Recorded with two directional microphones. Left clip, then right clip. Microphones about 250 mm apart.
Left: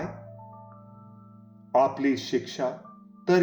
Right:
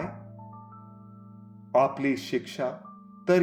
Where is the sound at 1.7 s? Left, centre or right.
Right.